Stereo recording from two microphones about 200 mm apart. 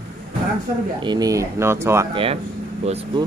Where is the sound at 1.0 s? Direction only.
20° right (ahead or behind).